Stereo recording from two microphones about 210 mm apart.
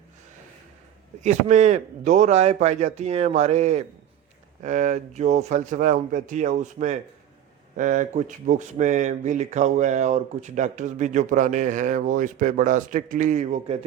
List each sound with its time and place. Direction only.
1.2 s speech: 35° right (ahead or behind)